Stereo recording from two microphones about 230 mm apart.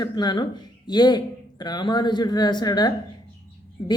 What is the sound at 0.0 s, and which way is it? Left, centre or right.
A woman's voice, centre.